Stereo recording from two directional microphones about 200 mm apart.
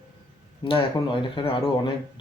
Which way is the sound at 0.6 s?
25° left (ahead or behind).